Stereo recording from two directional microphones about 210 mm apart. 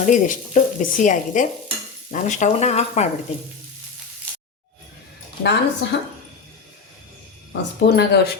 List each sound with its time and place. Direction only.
0.0 s speech: 35° left (ahead or behind)
5.4 s speech: 55° left (ahead or behind)
7.5 s speech: 50° left (ahead or behind)